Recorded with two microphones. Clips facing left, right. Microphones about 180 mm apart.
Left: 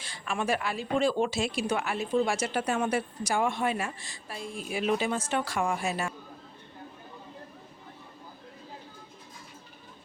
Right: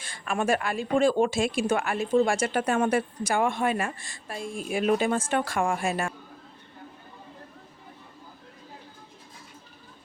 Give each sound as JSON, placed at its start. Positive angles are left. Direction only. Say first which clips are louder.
{"t": 0.0, "sound": "speech", "louder": "right 4 dB", "side_deg": -50}